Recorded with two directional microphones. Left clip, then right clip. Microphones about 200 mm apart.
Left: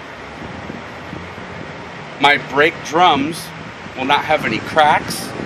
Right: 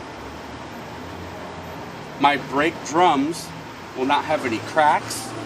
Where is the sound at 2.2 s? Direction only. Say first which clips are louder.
Left 6 dB; 35° left (ahead or behind).